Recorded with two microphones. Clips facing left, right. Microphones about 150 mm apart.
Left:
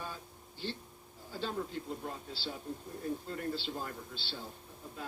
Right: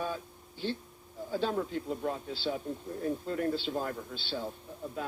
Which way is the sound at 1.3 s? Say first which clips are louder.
Right 7 dB; 65° right (ahead or behind).